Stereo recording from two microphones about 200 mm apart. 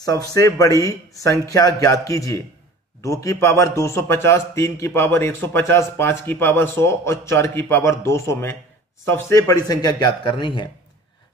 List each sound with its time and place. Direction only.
0.0 s a man's voice: 15° left (ahead or behind)